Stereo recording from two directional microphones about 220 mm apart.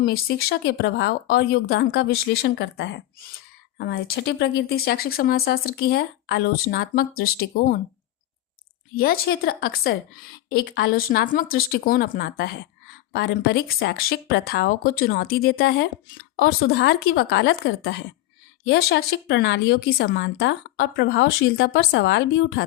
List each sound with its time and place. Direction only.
0.0 s speech: 45° left (ahead or behind)
9.0 s speech: 45° left (ahead or behind)